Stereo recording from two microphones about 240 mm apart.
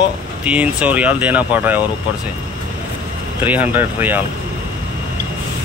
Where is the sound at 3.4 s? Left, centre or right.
Centre.